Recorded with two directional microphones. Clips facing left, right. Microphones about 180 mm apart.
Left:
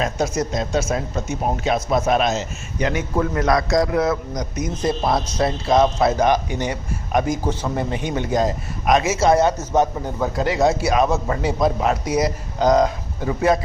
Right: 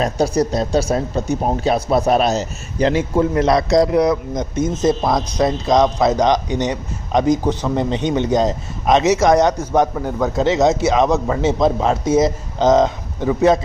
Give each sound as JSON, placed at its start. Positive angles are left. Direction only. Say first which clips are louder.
{"t": 0.0, "sound": "speech", "louder": "right 5 dB", "side_deg": -35}
{"t": 10.3, "sound": "speech", "louder": "right 3 dB", "side_deg": -25}